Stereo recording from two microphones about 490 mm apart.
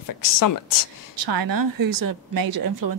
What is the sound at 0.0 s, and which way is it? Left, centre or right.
Speech, left.